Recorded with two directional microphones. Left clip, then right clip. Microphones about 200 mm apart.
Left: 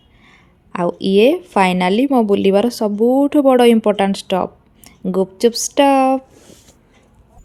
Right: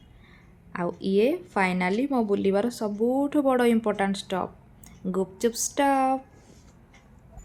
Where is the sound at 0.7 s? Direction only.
35° left (ahead or behind).